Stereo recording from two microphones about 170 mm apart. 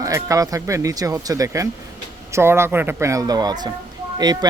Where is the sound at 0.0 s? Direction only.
20° right (ahead or behind).